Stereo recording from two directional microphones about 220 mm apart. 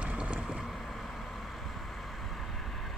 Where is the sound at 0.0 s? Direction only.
5° right (ahead or behind).